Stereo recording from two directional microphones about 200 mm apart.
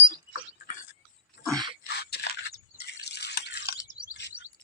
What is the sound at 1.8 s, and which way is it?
Drip, 55° left (ahead or behind).